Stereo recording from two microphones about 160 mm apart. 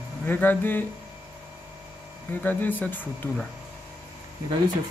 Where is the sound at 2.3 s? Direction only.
10° left (ahead or behind).